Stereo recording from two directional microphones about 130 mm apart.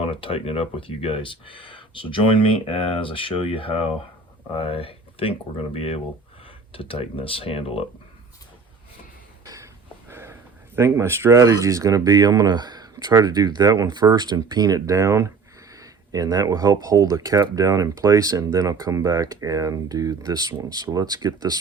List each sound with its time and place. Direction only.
0.0 s speech: 45° left (ahead or behind)
9.4 s a sound: 25° right (ahead or behind)
10.8 s speech: 20° right (ahead or behind)